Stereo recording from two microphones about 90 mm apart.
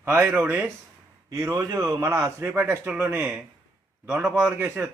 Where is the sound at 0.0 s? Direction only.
30° right (ahead or behind).